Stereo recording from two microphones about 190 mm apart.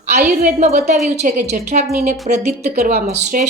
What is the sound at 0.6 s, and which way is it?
A woman's voice, 35° right (ahead or behind).